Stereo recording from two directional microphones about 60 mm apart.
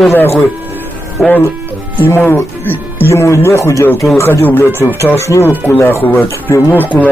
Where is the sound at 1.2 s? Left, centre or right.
Centre.